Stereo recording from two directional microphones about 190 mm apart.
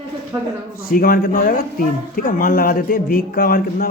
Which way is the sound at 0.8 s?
50° left (ahead or behind).